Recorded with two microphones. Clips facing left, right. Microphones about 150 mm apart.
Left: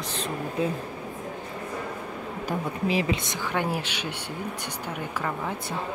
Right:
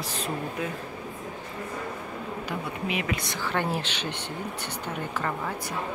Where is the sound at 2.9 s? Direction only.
30° left (ahead or behind).